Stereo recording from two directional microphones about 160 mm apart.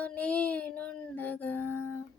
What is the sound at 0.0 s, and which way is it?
Music, 10° left (ahead or behind).